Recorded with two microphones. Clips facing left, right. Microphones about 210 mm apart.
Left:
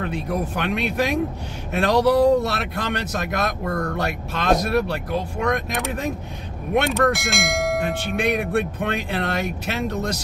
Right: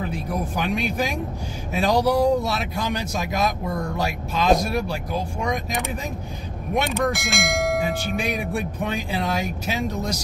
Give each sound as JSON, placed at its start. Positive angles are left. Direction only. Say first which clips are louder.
{"t": 0.6, "sound": "speech", "louder": "even", "side_deg": 60}
{"t": 6.9, "sound": "bell", "louder": "left 3 dB", "side_deg": 0}
{"t": 8.2, "sound": "speech", "louder": "left 9 dB", "side_deg": 60}